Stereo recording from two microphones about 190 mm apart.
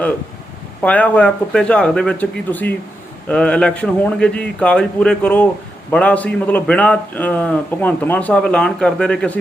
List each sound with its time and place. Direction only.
0.8 s a man's voice: 5° left (ahead or behind)